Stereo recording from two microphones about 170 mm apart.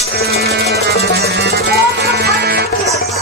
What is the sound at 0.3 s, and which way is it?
Music, 70° right (ahead or behind).